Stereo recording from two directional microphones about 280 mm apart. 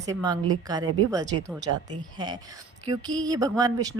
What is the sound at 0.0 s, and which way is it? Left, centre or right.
Speech, centre.